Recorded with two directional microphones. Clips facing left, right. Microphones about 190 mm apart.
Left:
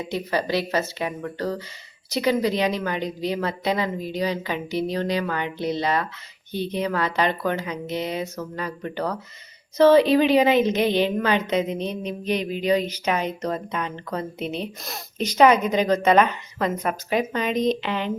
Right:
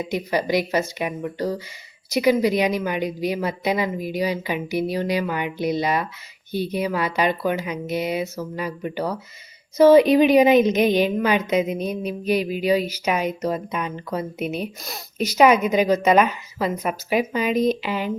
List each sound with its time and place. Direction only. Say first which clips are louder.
0.0 s a woman's voice: right 2 dB; 15° right (ahead or behind)